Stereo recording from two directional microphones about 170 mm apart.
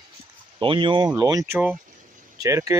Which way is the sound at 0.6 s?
30° right (ahead or behind).